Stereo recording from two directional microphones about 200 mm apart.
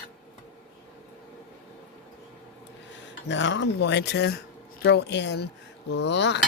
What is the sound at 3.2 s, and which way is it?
Speech, 65° left (ahead or behind).